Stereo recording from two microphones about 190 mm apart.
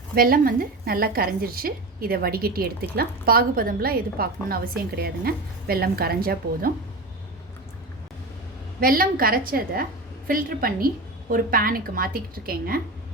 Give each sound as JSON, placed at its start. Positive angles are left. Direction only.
{"t": 0.2, "sound": "a woman's voice", "side_deg": -50}
{"t": 8.8, "sound": "a woman's voice", "side_deg": -50}